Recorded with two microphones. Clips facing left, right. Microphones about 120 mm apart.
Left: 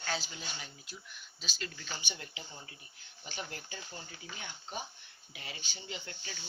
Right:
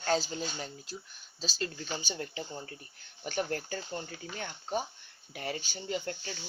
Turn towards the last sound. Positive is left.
turn(degrees=-45)  # may be behind; listen again after turning